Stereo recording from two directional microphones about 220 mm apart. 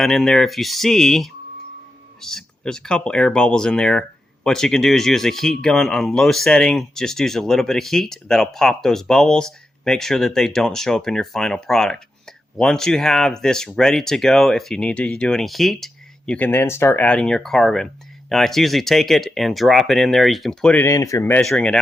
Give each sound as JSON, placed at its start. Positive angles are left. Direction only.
{"t": 0.0, "sound": "speech", "side_deg": 0}